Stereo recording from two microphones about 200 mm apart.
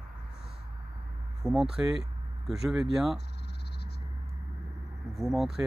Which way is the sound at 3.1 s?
55° left (ahead or behind).